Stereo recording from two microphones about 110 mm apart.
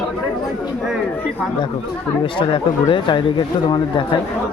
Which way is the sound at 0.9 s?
5° right (ahead or behind).